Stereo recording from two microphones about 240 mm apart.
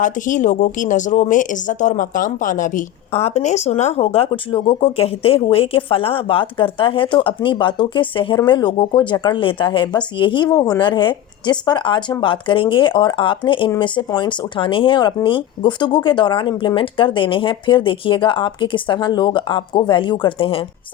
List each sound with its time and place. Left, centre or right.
0.0 s a woman's voice: left